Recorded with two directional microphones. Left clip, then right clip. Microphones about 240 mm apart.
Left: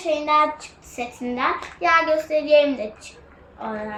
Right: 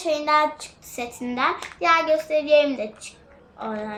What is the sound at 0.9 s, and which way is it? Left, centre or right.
A child's voice, centre.